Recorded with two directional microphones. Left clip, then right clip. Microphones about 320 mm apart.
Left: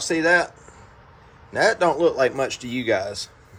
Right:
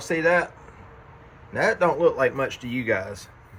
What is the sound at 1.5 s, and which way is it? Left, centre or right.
Speech, centre.